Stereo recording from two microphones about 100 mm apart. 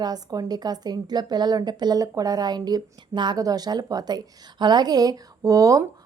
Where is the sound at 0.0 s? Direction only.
40° right (ahead or behind).